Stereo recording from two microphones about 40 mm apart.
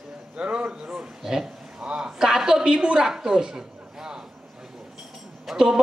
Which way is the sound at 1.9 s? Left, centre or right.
Centre.